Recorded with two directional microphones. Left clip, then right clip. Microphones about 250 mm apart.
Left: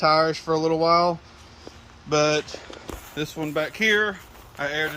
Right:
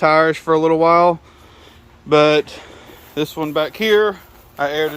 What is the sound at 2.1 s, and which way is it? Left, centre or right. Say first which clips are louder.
Speech: right 9 dB; centre.